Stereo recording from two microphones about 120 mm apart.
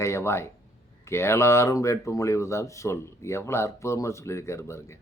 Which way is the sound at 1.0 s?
20° left (ahead or behind).